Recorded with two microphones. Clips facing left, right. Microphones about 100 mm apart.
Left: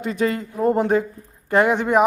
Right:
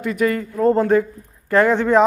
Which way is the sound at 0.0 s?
25° left (ahead or behind).